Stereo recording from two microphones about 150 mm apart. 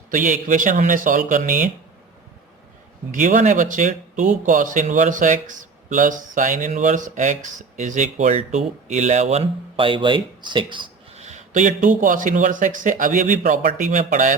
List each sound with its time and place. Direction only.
0.1 s speech: 60° right (ahead or behind)
3.1 s speech: 60° right (ahead or behind); by 11.2 s 35° right (ahead or behind)
11.2 s speech: 50° right (ahead or behind)